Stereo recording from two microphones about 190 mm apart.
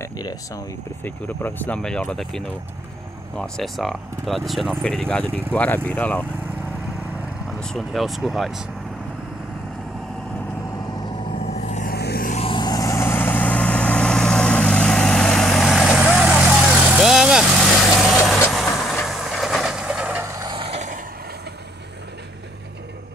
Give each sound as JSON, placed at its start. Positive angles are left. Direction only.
{"t": 0.0, "sound": "speech", "side_deg": 20}
{"t": 7.6, "sound": "speech", "side_deg": 0}
{"t": 10.9, "sound": "vehicle", "side_deg": 20}
{"t": 11.4, "sound": "vehicle", "side_deg": 35}
{"t": 11.9, "sound": "vehicle", "side_deg": 55}
{"t": 12.4, "sound": "vehicle", "side_deg": 25}